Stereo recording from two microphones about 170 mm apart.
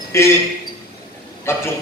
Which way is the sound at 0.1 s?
15° left (ahead or behind).